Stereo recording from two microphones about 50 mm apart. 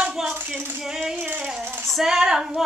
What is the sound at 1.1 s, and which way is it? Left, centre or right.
Rattle, right.